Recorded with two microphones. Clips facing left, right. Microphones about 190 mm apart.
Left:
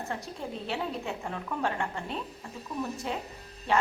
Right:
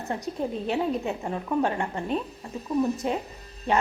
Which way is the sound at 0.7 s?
20° right (ahead or behind).